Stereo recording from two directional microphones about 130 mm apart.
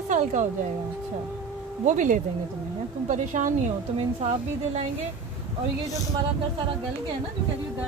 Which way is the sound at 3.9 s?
55° right (ahead or behind).